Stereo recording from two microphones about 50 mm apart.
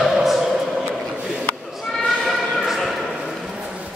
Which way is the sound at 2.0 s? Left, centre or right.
Centre.